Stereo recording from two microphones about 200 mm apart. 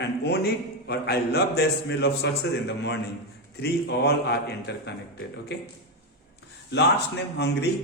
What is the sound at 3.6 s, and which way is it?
A man's voice, 55° left (ahead or behind).